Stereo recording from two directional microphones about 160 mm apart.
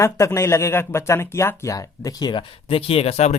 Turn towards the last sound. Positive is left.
turn(degrees=40)  # may be behind; listen again after turning